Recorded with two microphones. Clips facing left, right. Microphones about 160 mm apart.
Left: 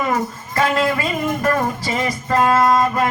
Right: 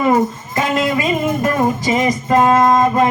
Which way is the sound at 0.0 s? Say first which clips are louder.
Right 6 dB; 20° right (ahead or behind).